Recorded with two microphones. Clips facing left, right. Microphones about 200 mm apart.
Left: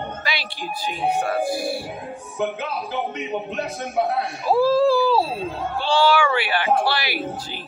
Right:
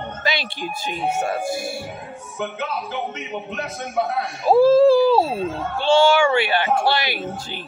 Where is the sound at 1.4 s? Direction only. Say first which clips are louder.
Left 2 dB; 45° right (ahead or behind).